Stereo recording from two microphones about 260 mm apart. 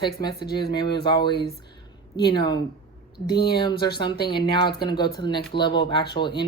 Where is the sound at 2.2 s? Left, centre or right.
Centre.